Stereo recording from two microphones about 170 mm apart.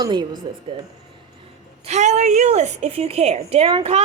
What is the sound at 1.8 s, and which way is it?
A woman's voice, 40° right (ahead or behind).